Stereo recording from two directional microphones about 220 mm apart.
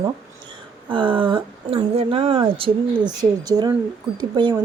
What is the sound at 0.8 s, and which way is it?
Speech, 20° right (ahead or behind).